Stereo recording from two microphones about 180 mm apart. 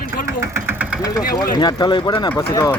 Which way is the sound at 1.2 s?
55° left (ahead or behind).